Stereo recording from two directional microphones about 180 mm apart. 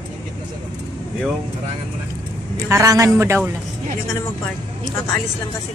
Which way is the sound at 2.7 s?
15° right (ahead or behind).